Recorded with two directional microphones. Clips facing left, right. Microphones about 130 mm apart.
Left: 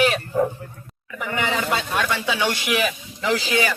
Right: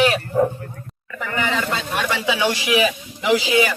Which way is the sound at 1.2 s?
15° left (ahead or behind).